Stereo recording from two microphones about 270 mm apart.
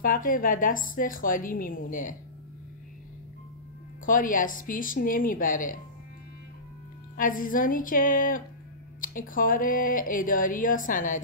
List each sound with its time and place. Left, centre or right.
0.0 s speech: left
4.0 s speech: left
7.2 s speech: left